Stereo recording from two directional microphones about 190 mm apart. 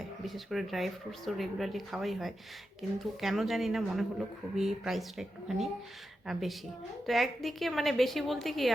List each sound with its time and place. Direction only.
0.3 s speech: centre (ahead or behind)